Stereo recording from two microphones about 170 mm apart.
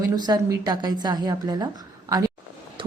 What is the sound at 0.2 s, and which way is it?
A woman's voice, 20° right (ahead or behind).